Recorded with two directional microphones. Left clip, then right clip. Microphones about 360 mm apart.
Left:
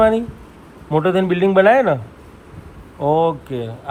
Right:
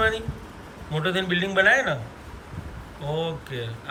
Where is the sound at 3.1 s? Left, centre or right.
Centre.